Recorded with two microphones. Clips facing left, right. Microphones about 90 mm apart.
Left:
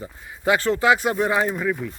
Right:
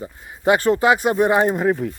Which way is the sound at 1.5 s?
55° right (ahead or behind).